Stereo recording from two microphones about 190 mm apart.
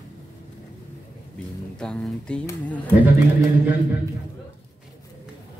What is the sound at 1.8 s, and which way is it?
Speech, 5° left (ahead or behind).